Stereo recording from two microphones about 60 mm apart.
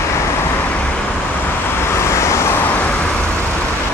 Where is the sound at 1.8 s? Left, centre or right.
Left.